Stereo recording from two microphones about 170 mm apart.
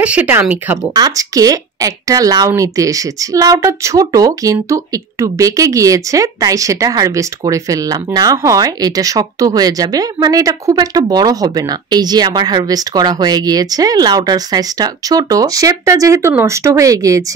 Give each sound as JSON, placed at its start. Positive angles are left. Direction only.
{"t": 0.0, "sound": "speech", "side_deg": -10}